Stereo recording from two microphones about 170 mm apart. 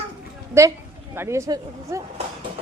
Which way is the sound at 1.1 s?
15° right (ahead or behind).